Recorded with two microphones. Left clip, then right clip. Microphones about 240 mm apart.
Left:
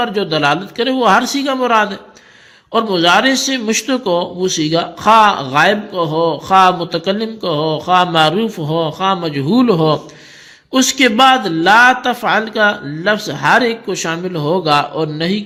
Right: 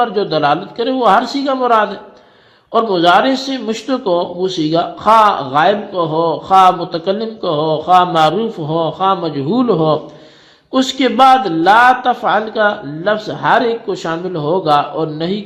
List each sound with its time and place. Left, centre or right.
0.0 s a man's voice: left